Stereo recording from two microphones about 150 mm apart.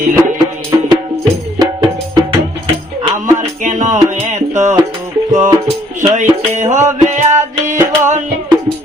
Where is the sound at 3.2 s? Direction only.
55° right (ahead or behind).